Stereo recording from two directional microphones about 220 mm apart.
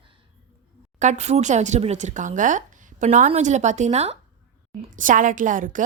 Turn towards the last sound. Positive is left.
turn(degrees=-35)  # may be behind; listen again after turning